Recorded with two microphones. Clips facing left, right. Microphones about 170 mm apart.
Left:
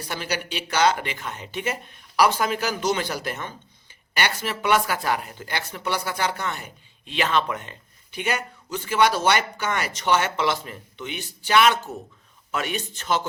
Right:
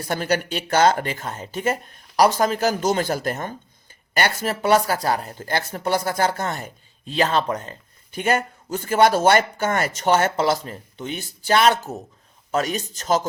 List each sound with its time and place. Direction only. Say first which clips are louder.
0.1 s speech: right 7 dB; 45° right (ahead or behind)